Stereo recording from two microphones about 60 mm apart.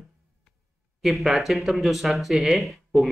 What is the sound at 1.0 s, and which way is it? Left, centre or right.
Speech, centre.